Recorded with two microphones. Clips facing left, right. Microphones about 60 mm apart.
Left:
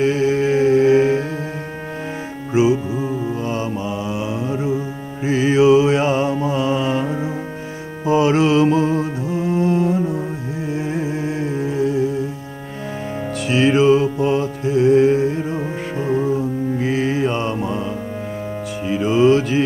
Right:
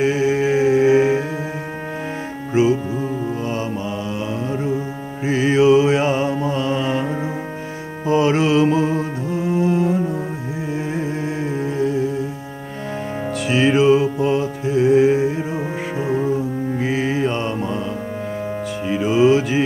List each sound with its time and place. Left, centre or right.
0.0 s music: centre
2.5 s music: centre
5.2 s music: centre
13.5 s music: centre
16.7 s mantra: centre
18.9 s music: centre